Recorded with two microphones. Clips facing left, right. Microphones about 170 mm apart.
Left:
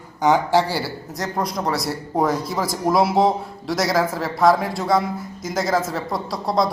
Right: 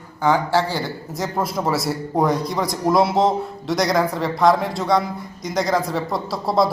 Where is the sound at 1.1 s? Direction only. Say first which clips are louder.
Right 1 dB; centre (ahead or behind).